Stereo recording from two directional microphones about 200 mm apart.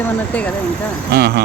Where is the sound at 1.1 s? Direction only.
55° right (ahead or behind).